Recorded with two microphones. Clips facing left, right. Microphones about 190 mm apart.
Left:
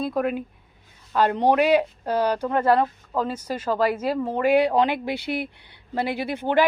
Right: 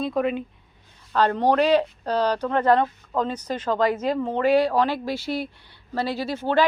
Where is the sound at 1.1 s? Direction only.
15° left (ahead or behind).